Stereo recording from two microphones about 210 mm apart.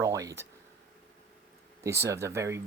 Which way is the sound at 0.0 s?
15° right (ahead or behind).